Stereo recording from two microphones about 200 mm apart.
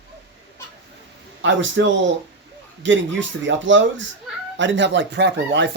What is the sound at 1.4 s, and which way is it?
A man's voice, 65° right (ahead or behind).